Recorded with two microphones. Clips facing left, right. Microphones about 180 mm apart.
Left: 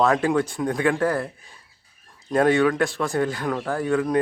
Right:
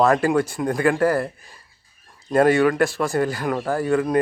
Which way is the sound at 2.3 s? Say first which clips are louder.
Right 2 dB; 5° right (ahead or behind).